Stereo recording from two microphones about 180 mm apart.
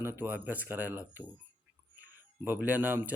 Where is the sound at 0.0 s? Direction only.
10° right (ahead or behind).